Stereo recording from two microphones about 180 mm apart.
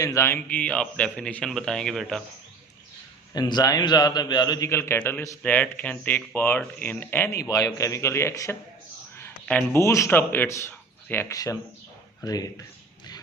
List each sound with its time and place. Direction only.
0.0 s a man's voice: 15° left (ahead or behind)
3.3 s a man's voice: 20° left (ahead or behind)